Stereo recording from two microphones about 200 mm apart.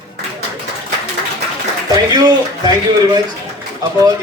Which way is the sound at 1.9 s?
20° right (ahead or behind).